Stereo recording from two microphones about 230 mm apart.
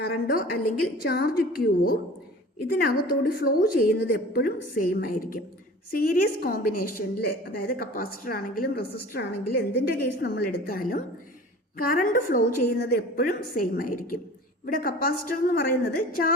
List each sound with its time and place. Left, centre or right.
0.0 s a woman's voice: left